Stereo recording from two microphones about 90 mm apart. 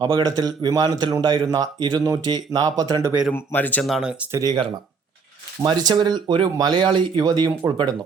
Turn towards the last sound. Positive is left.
turn(degrees=-45)  # may be behind; listen again after turning